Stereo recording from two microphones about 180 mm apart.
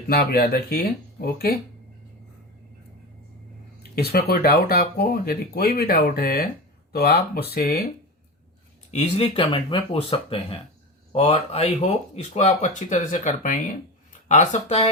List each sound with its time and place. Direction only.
0.1 s speech: 60° left (ahead or behind)
3.9 s speech: 60° left (ahead or behind)
8.9 s speech: 35° left (ahead or behind)